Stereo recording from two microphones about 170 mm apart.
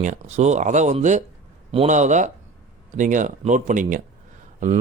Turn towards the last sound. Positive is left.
turn(degrees=-45)  # may be behind; listen again after turning